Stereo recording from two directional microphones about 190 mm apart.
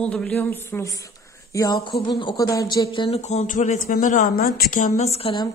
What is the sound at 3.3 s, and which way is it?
Speech, 40° left (ahead or behind).